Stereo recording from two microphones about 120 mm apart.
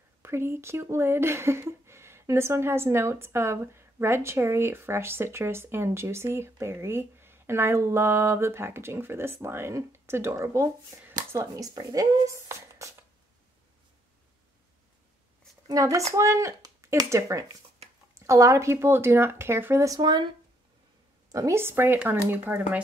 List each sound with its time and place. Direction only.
0.2 s speech: 20° right (ahead or behind)
15.7 s speech: 25° right (ahead or behind)
21.3 s speech: 25° right (ahead or behind)